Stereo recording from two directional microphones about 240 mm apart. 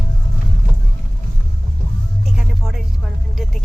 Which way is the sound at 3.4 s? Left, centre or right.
Centre.